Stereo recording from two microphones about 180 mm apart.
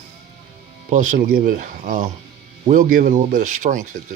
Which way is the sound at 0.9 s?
45° right (ahead or behind).